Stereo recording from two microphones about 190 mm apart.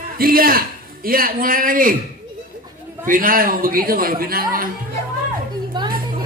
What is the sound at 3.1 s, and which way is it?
Speech, 45° right (ahead or behind).